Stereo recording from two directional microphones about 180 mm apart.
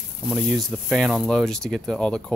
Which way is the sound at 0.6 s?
Centre (ahead or behind).